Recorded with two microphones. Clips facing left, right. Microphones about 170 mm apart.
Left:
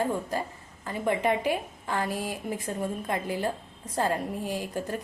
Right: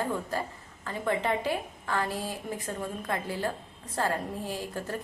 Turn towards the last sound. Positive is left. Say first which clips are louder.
# left 3 dB
turn(degrees=15)  # may be behind; listen again after turning